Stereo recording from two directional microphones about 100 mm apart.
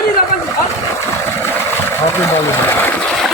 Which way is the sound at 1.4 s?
25° left (ahead or behind).